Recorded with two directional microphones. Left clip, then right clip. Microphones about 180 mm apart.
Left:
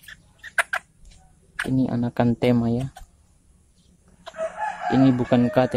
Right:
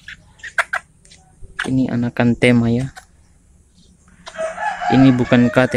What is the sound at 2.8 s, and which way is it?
Speech, 15° right (ahead or behind).